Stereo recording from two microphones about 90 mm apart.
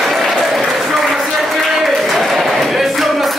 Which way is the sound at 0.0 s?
Centre (ahead or behind).